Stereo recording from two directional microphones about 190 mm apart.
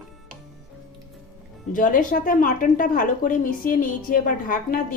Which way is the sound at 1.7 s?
45° left (ahead or behind).